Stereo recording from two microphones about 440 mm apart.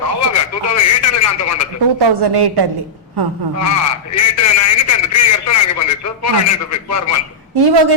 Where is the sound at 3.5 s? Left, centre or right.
Left.